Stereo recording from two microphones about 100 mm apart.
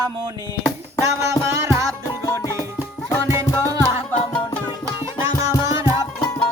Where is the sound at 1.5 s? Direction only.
30° right (ahead or behind).